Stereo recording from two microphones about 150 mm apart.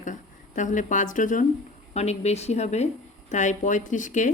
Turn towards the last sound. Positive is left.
turn(degrees=55)  # may be behind; listen again after turning